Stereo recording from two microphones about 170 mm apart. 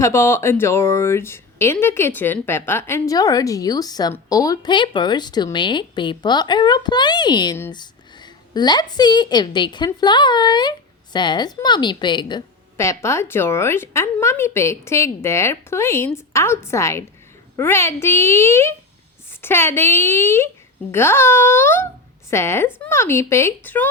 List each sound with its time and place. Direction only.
0.0 s a woman's voice: 15° left (ahead or behind)
12.7 s a woman's voice: 15° left (ahead or behind)